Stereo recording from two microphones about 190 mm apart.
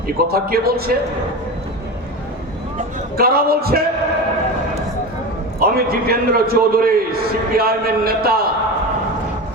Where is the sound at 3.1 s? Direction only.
50° right (ahead or behind).